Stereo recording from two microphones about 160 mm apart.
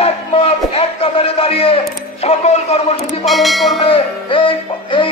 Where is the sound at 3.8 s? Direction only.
35° left (ahead or behind).